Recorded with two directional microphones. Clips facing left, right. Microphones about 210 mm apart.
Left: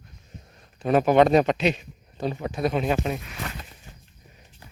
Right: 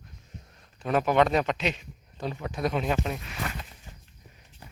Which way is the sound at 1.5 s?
10° left (ahead or behind).